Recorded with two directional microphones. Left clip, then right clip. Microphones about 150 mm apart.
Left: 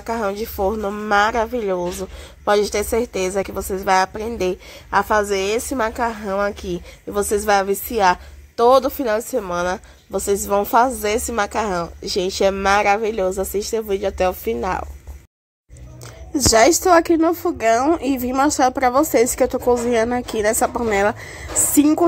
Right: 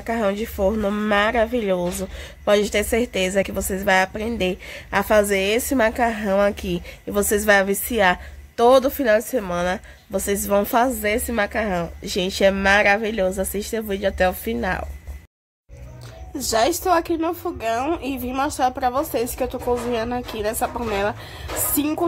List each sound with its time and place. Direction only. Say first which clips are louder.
0.0 s speech: even; 5° left (ahead or behind)
0.7 s speech: right 1 dB; 10° right (ahead or behind)
1.1 s speech: left 2 dB; 10° left (ahead or behind)
2.4 s a woman's voice: left 1 dB; 10° left (ahead or behind)
16.3 s a woman's voice: left 6 dB; 55° left (ahead or behind)
21.7 s music: left 9 dB; 40° left (ahead or behind)